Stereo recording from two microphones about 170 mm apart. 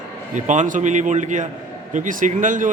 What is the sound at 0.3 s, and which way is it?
A man's voice, 45° right (ahead or behind).